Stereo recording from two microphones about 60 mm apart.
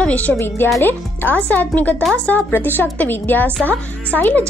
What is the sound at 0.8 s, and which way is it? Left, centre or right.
A woman's voice, left.